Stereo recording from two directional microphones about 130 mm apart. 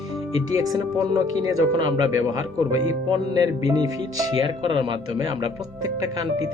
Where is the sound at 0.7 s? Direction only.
30° right (ahead or behind).